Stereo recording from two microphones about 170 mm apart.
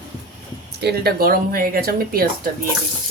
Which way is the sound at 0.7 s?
70° right (ahead or behind).